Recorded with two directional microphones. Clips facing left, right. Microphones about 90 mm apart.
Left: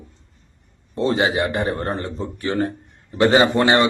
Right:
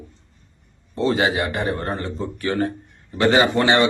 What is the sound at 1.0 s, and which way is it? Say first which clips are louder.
A man's voice: left 1 dB; 30° left (ahead or behind).